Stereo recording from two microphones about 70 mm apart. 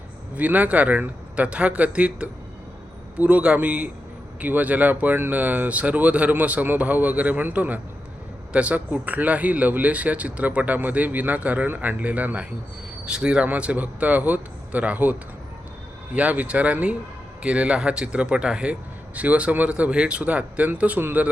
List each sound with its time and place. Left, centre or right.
0.3 s speech: right
16.1 s speech: right